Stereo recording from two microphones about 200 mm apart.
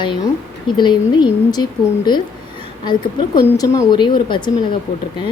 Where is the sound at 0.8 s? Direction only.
20° left (ahead or behind).